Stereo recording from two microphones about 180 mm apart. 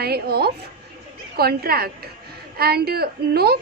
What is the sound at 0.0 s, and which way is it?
A woman's voice, 60° right (ahead or behind).